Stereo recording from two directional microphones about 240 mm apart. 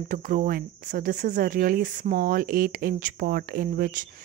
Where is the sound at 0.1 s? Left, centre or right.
Right.